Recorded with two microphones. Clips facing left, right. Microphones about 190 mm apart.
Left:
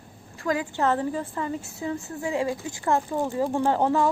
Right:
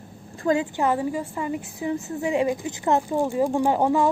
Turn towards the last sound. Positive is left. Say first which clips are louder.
# right 2 dB
turn(degrees=-15)  # may be behind; listen again after turning